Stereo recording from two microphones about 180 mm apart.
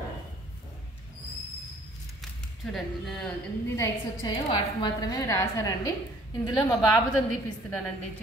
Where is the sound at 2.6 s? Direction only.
Centre (ahead or behind).